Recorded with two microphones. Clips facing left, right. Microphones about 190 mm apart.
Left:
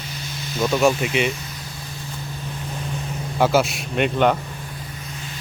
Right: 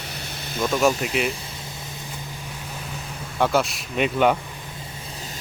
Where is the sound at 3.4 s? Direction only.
Centre (ahead or behind).